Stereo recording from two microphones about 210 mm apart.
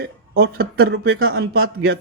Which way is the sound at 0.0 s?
45° right (ahead or behind).